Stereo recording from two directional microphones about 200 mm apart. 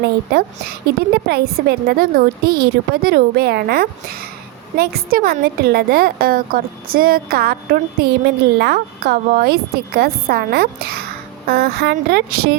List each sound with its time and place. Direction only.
0.0 s a woman's voice: 55° right (ahead or behind)